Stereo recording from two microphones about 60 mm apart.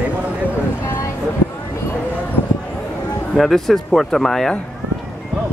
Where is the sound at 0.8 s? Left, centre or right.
Left.